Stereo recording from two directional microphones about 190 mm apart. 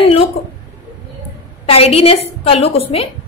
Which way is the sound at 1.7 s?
30° left (ahead or behind).